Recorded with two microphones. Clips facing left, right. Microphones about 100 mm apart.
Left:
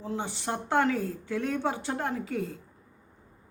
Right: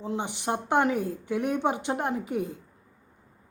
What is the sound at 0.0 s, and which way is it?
A woman's voice, 20° right (ahead or behind).